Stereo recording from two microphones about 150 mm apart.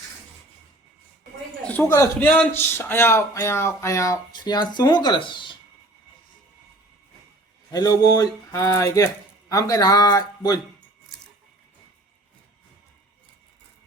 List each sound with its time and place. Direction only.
1.6 s speech: 15° left (ahead or behind); by 5.5 s 30° left (ahead or behind)
7.7 s speech: 25° left (ahead or behind)